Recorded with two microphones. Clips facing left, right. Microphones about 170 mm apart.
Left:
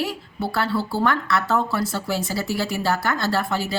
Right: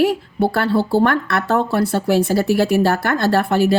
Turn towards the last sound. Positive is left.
turn(degrees=-60)  # may be behind; listen again after turning